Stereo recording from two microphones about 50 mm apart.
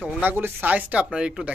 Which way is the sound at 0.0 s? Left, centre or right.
Right.